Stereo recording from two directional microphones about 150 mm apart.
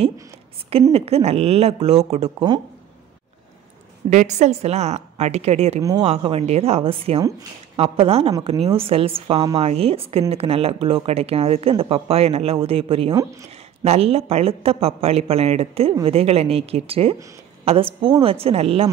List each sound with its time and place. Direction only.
0.9 s speech: 40° right (ahead or behind)
4.1 s speech: 50° right (ahead or behind)
5.8 s speech: 20° right (ahead or behind)
6.0 s speech: 40° right (ahead or behind)